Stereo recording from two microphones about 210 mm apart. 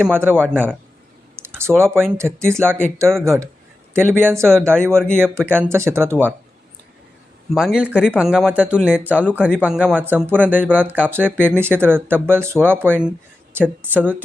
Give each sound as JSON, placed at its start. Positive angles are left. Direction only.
{"t": 0.0, "sound": "speech", "side_deg": -10}
{"t": 1.4, "sound": "a sound", "side_deg": -10}
{"t": 2.1, "sound": "speech", "side_deg": -15}
{"t": 7.5, "sound": "speech", "side_deg": 0}